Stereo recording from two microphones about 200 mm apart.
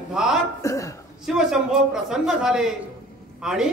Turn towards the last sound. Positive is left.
turn(degrees=-5)  # may be behind; listen again after turning